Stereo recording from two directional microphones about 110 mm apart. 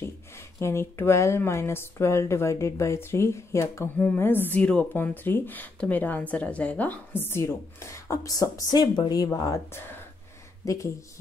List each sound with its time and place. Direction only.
0.6 s speech: 25° left (ahead or behind)
4.0 s speech: 15° left (ahead or behind)